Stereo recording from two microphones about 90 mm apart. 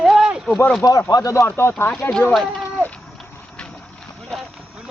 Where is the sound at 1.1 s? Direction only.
40° left (ahead or behind).